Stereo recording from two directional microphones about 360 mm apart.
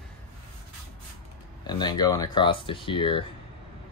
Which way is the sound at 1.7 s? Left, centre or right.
Centre.